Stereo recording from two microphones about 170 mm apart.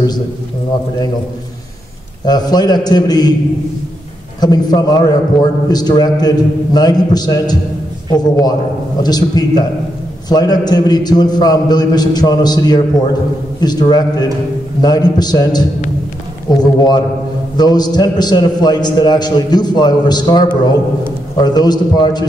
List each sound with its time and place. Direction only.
2.2 s a man's voice: 25° left (ahead or behind)
4.4 s a man's voice: 25° left (ahead or behind)